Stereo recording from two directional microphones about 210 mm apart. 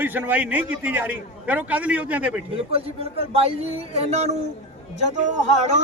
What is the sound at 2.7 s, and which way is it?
Speech, 30° right (ahead or behind).